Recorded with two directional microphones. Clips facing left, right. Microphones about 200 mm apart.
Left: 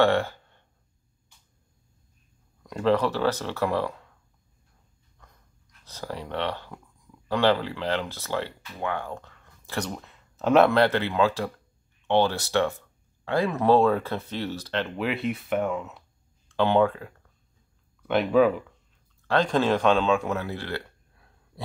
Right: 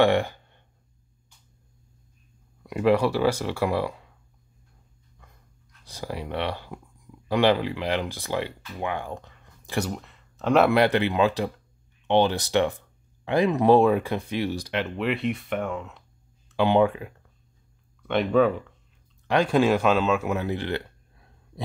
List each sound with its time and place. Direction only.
0.0 s a sound: 15° right (ahead or behind)
2.6 s speech: 10° right (ahead or behind)
5.9 s speech: 10° right (ahead or behind)
9.8 s speech: centre (ahead or behind)
10.7 s speech: 15° right (ahead or behind)
15.0 s speech: centre (ahead or behind)
16.4 s speech: 10° right (ahead or behind)
18.0 s speech: 5° left (ahead or behind)
19.2 s speech: 10° right (ahead or behind)
20.3 s a sound: 20° right (ahead or behind)